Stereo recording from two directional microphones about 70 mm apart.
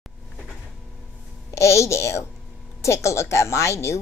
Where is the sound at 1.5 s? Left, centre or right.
Left.